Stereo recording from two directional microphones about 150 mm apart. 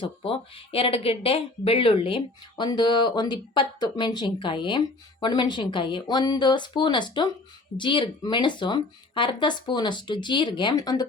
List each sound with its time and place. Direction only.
0.0 s speech: 35° left (ahead or behind)